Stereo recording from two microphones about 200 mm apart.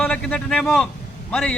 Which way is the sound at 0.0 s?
5° left (ahead or behind).